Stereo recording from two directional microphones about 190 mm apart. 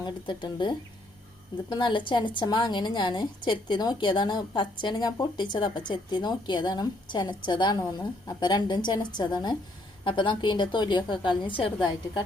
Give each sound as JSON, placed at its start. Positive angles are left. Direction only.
{"t": 0.0, "sound": "a woman's voice", "side_deg": 25}